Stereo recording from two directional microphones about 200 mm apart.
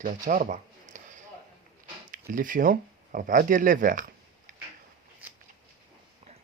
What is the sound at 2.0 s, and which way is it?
Speech, 40° right (ahead or behind).